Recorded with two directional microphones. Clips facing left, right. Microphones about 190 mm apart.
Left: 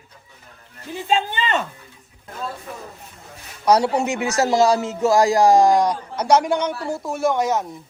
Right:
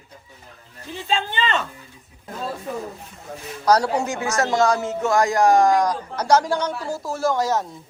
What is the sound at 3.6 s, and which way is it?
A man's voice, 25° left (ahead or behind).